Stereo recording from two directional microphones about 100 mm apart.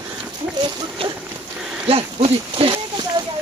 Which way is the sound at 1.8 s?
65° right (ahead or behind).